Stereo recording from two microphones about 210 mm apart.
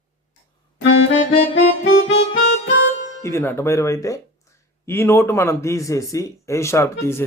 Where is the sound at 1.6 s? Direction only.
60° left (ahead or behind).